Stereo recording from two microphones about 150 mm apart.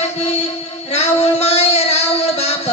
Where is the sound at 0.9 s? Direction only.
45° left (ahead or behind).